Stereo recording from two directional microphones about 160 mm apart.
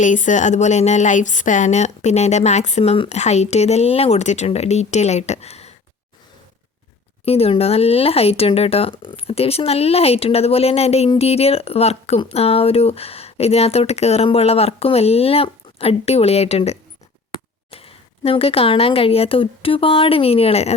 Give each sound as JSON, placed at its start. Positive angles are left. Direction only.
{"t": 0.0, "sound": "speech", "side_deg": 50}
{"t": 7.3, "sound": "speech", "side_deg": 40}